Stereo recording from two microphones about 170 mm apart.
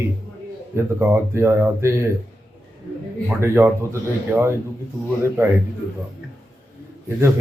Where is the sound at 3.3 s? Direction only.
15° right (ahead or behind).